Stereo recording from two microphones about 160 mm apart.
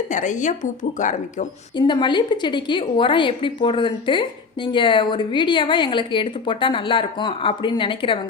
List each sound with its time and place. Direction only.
0.1 s speech: 50° left (ahead or behind)
1.7 s a woman's voice: 30° left (ahead or behind)